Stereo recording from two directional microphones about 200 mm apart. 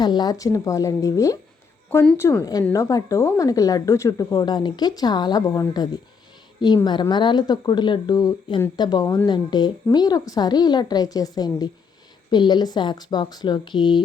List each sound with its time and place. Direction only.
0.0 s a woman's voice: 20° left (ahead or behind)